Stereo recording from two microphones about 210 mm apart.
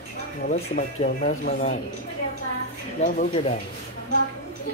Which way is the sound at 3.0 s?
35° left (ahead or behind).